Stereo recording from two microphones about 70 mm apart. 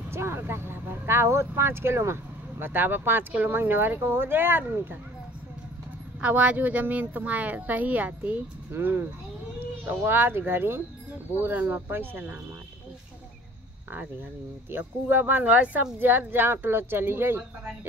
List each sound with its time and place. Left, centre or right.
0.1 s speech: right
6.2 s speech: centre
14.7 s speech: right